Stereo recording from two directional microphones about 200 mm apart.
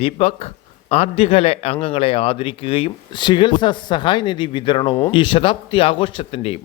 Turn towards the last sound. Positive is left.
turn(degrees=30)  # may be behind; listen again after turning